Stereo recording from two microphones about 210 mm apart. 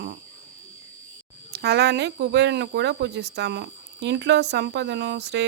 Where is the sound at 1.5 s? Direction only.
50° right (ahead or behind).